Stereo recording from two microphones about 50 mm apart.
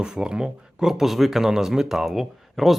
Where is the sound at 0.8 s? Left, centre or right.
Centre.